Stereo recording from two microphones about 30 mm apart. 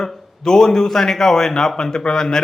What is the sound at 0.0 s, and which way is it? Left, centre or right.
A man's voice, left.